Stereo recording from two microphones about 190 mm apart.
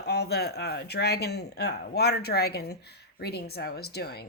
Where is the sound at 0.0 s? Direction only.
60° left (ahead or behind).